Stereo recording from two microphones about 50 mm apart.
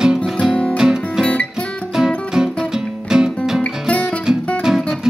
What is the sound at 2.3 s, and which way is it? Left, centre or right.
Music, centre.